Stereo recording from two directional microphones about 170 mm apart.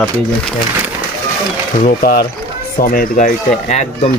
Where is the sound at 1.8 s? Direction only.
55° left (ahead or behind).